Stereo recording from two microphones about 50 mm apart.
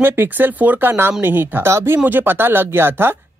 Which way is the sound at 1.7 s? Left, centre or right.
Right.